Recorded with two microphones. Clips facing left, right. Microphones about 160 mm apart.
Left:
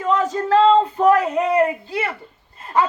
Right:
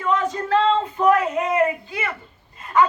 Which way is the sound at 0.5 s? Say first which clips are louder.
Left 6 dB; 35° left (ahead or behind).